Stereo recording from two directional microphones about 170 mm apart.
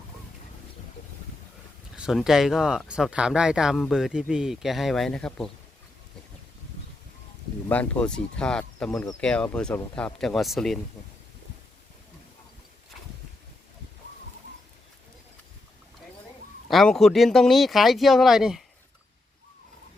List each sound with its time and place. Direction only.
2.0 s speech: centre (ahead or behind)
7.7 s speech: 10° left (ahead or behind)
8.9 s speech: 15° left (ahead or behind)
9.2 s speech: 5° left (ahead or behind)
16.6 s speech: centre (ahead or behind)